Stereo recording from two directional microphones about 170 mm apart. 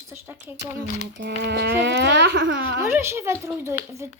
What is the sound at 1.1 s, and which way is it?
Speech, 85° right.